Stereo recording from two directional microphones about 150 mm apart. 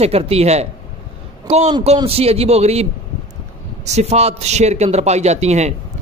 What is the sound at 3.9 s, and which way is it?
Speech, 45° right (ahead or behind).